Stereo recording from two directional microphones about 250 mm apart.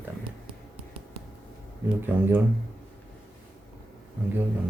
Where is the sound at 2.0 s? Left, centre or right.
Centre.